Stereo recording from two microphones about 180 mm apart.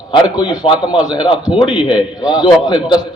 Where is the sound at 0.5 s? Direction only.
25° left (ahead or behind).